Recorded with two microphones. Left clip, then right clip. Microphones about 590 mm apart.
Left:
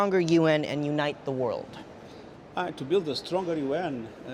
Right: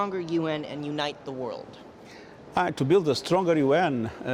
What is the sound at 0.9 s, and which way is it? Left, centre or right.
Speech, left.